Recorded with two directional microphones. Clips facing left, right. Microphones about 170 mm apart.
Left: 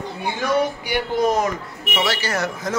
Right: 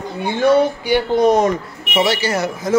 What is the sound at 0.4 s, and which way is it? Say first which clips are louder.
Speech: right 8 dB; 25° right (ahead or behind).